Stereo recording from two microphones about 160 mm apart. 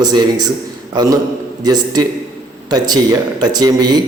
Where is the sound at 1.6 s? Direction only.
25° right (ahead or behind).